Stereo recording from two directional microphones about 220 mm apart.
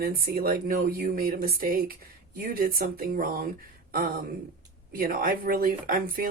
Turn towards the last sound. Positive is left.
turn(degrees=-40)  # may be behind; listen again after turning